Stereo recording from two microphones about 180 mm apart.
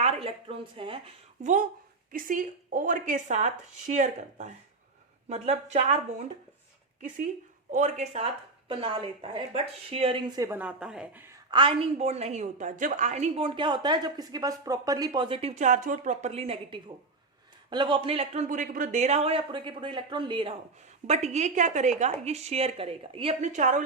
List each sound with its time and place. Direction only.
0.0 s a sound: 35° right (ahead or behind)
2.1 s a woman's voice: 50° right (ahead or behind)
7.7 s speech: 40° right (ahead or behind); by 11.3 s 10° right (ahead or behind)
11.5 s a woman's voice: 30° right (ahead or behind)